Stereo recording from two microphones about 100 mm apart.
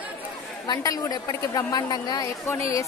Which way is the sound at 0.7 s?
40° left (ahead or behind).